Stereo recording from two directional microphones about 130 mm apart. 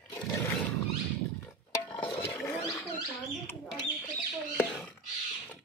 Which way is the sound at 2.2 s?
10° left (ahead or behind).